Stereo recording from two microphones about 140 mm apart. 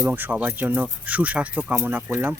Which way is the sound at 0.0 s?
15° right (ahead or behind).